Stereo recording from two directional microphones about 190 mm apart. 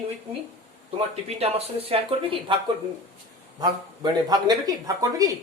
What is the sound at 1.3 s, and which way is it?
Speech, 35° right (ahead or behind).